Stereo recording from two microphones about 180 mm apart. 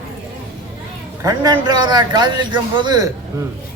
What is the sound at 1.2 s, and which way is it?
A man's voice, 20° right (ahead or behind).